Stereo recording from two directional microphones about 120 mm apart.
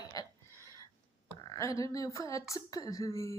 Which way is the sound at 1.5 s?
30° left (ahead or behind).